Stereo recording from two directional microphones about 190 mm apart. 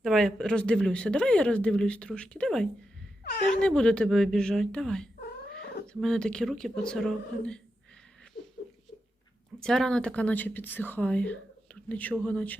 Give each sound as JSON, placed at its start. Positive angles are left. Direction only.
{"t": 0.0, "sound": "speech", "side_deg": 0}
{"t": 5.2, "sound": "cat", "side_deg": 55}
{"t": 5.9, "sound": "speech", "side_deg": 5}
{"t": 9.6, "sound": "speech", "side_deg": 0}